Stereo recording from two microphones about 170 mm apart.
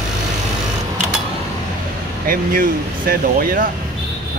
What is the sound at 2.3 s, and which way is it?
Speech, 55° right (ahead or behind).